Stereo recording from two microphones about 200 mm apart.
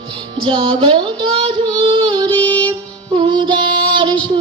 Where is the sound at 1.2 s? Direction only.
30° right (ahead or behind).